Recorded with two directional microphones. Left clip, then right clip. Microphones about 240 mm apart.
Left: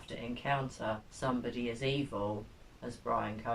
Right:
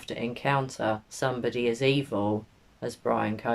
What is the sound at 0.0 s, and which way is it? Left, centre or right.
Speech, right.